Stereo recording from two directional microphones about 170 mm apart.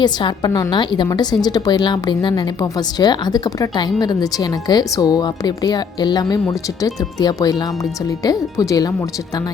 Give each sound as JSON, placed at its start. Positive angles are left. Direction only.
{"t": 0.0, "sound": "a woman's voice", "side_deg": 25}